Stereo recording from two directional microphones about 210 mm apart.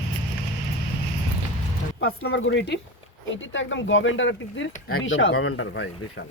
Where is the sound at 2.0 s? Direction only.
60° left (ahead or behind).